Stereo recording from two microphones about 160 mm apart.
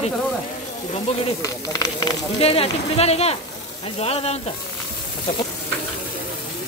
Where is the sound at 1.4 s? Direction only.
25° left (ahead or behind).